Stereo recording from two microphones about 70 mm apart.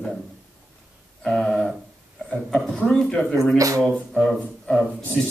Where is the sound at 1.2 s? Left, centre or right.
Centre.